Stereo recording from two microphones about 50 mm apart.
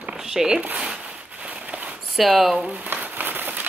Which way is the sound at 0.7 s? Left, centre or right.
Right.